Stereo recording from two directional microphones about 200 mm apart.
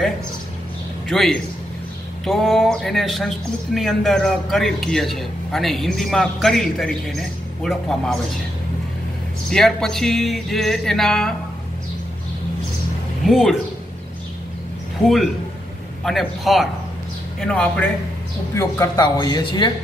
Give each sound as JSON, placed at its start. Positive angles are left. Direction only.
{"t": 1.0, "sound": "a man's voice", "side_deg": 0}
{"t": 9.5, "sound": "speech", "side_deg": 0}
{"t": 13.3, "sound": "speech", "side_deg": 0}
{"t": 16.0, "sound": "a man's voice", "side_deg": 0}